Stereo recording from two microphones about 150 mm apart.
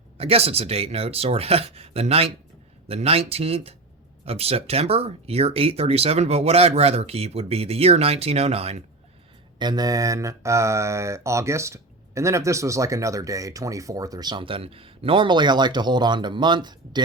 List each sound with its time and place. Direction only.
0.2 s speech: 40° right (ahead or behind)
9.6 s speech: 30° right (ahead or behind)